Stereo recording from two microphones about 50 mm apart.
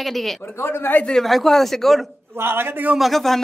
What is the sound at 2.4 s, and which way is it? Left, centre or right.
Speech, right.